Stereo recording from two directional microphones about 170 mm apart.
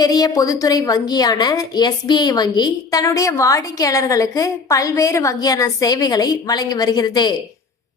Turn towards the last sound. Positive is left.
turn(degrees=25)  # may be behind; listen again after turning